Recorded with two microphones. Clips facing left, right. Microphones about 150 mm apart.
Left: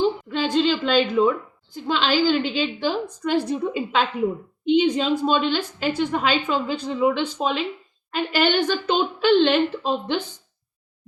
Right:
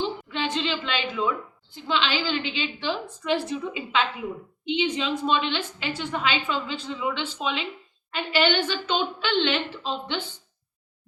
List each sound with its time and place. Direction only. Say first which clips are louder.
0.0 s a woman's voice: left 6 dB; 40° left (ahead or behind)